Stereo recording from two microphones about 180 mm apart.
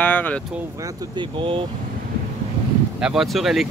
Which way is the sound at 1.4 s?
30° right (ahead or behind).